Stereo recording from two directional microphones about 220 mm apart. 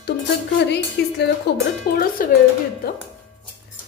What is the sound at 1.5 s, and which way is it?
Speech, 50° left (ahead or behind).